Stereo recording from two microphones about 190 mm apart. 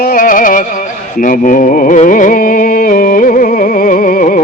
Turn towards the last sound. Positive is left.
turn(degrees=45)  # may be behind; listen again after turning